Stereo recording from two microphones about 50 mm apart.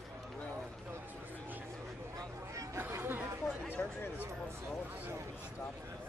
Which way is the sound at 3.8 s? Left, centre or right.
Left.